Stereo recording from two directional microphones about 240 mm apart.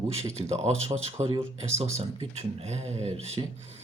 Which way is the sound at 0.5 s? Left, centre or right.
Right.